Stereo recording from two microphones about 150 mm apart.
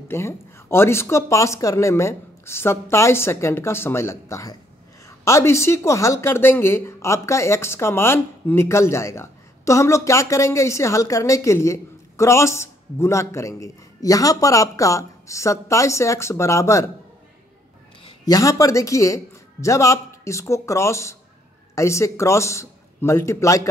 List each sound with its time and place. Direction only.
0.1 s a woman's voice: 15° left (ahead or behind)
18.2 s a woman's voice: 25° left (ahead or behind)